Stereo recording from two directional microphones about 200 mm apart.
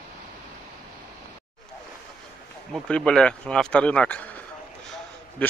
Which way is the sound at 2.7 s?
5° left (ahead or behind).